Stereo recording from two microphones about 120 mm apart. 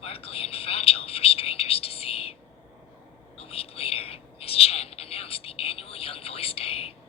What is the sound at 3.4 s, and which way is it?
Whispering, 55° left (ahead or behind).